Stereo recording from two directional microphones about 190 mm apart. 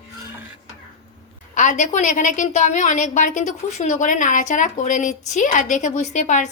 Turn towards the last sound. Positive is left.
turn(degrees=40)  # may be behind; listen again after turning